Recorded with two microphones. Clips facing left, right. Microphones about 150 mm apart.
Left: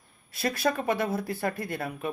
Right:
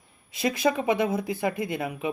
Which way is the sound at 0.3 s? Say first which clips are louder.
Right 3 dB; 15° right (ahead or behind).